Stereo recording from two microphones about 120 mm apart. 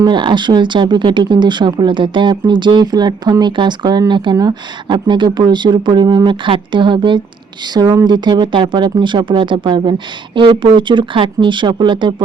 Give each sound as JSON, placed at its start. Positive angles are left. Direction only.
{"t": 0.0, "sound": "speech", "side_deg": -40}